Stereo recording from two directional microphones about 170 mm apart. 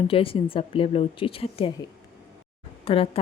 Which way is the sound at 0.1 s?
30° left (ahead or behind).